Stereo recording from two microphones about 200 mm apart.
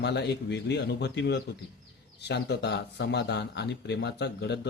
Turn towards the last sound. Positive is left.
turn(degrees=60)  # may be behind; listen again after turning